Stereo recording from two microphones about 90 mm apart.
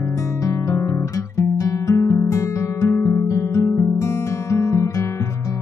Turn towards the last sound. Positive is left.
turn(degrees=35)  # may be behind; listen again after turning